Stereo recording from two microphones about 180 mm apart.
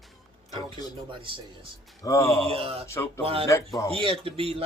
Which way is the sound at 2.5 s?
35° right (ahead or behind).